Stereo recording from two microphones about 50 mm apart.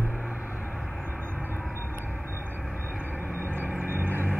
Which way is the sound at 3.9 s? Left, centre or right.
Right.